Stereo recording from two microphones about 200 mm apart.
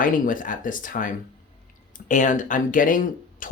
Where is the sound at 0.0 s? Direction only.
40° left (ahead or behind).